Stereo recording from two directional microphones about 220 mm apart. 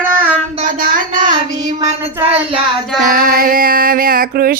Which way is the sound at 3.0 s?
40° right (ahead or behind).